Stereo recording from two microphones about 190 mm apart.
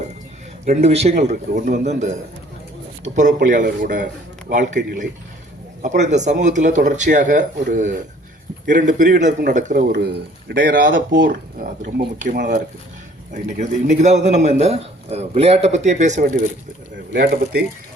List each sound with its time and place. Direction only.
0.6 s speech: 35° right (ahead or behind)
3.2 s speech: 45° right (ahead or behind)
5.8 s speech: 40° right (ahead or behind)
10.8 s speech: 75° right (ahead or behind)
11.3 s speech: 45° right (ahead or behind)
17.1 s speech: 60° right (ahead or behind)